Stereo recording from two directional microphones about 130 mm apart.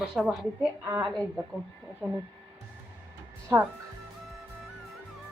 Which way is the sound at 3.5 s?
30° right (ahead or behind).